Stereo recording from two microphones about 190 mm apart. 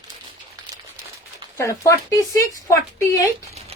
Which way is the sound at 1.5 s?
15° left (ahead or behind).